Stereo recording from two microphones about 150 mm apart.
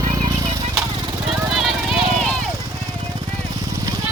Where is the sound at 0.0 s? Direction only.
25° right (ahead or behind).